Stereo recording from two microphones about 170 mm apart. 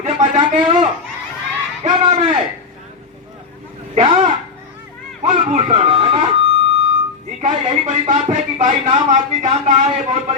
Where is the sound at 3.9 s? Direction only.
45° right (ahead or behind).